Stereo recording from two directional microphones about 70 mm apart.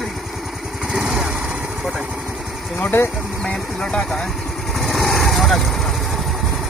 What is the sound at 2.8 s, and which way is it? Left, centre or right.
Speech, left.